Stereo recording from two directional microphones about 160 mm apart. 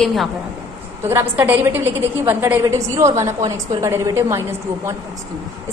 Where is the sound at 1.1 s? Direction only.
15° right (ahead or behind).